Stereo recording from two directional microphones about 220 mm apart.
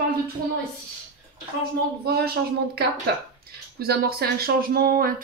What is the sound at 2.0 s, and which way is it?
Speech, 45° right (ahead or behind).